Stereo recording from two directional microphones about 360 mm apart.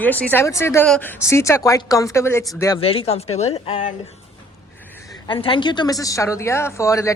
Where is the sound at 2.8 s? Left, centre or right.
Centre.